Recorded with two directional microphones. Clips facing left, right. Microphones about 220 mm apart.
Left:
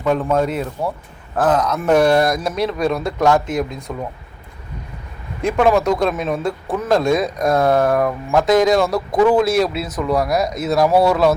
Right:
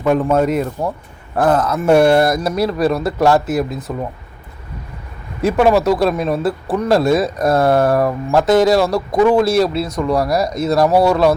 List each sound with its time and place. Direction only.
0.0 s speech: 10° right (ahead or behind)
5.4 s speech: 5° right (ahead or behind)